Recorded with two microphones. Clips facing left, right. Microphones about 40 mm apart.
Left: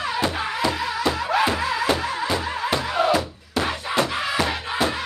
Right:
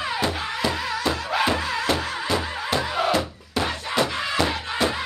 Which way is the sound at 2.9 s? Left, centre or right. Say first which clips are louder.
Left 2 dB; centre.